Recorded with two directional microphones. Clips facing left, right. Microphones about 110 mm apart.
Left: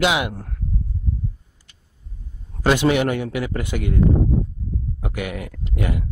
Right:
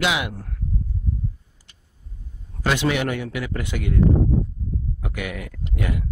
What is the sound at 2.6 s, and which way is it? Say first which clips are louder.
A man's voice: left 4 dB; 40° left (ahead or behind).